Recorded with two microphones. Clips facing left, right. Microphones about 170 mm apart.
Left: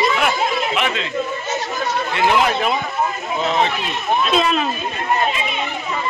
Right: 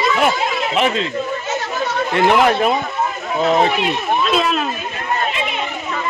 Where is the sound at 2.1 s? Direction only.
45° right (ahead or behind).